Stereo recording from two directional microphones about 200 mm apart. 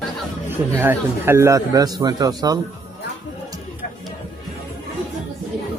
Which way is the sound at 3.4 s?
15° right (ahead or behind).